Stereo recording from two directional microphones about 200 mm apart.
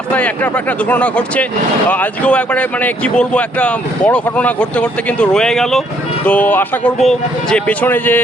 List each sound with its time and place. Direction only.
0.9 s speech: 5° left (ahead or behind)